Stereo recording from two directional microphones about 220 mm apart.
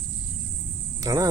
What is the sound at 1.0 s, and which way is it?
Speech, 15° right (ahead or behind).